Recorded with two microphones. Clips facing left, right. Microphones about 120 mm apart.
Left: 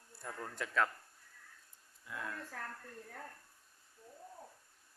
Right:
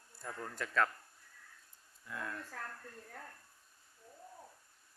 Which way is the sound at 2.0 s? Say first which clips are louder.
Right 1 dB; 10° left (ahead or behind).